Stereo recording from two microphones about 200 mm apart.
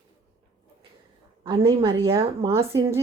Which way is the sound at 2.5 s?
15° right (ahead or behind).